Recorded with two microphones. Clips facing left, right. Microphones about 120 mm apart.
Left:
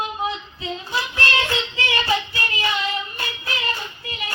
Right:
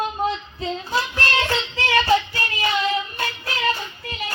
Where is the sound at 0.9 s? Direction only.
40° right (ahead or behind).